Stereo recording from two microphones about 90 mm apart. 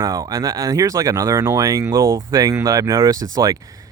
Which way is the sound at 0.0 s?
40° right (ahead or behind).